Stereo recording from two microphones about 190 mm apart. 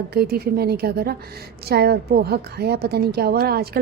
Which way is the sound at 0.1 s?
55° right (ahead or behind).